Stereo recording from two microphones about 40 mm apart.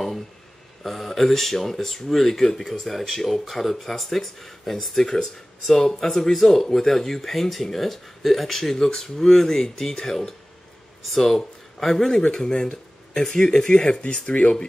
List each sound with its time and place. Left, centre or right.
0.8 s speech: centre; by 14.7 s left